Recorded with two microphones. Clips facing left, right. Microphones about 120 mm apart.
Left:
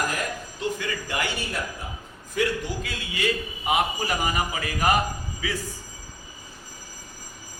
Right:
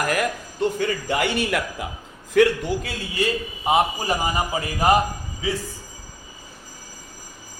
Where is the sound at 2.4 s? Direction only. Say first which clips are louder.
Right 9 dB; 70° right (ahead or behind).